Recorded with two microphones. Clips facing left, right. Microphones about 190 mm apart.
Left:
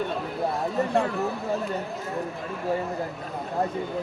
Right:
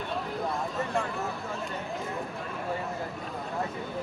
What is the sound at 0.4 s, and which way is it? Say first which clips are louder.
Speech: left 9 dB; 35° left (ahead or behind).